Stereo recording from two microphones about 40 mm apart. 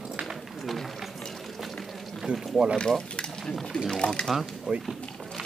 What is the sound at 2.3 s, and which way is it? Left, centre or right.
Boat, right.